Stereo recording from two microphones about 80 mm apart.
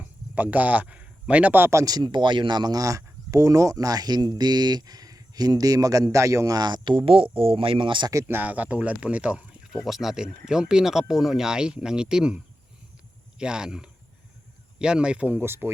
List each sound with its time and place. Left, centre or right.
0.0 s speech: centre
1.7 s speech: right
6.6 s speech: right
7.8 s speech: right
8.3 s speech: right
9.7 s speech: centre
13.4 s speech: centre
15.4 s speech: right